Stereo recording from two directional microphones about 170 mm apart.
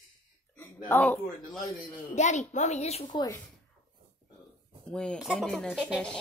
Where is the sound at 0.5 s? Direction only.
10° left (ahead or behind).